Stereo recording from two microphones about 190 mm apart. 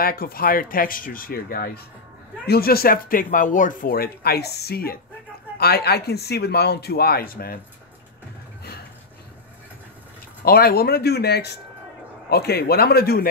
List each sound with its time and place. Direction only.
0.0 s a man's voice: 50° left (ahead or behind)
10.4 s a man's voice: 55° left (ahead or behind)